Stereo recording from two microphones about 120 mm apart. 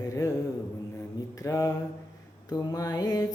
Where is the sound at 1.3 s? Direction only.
25° left (ahead or behind).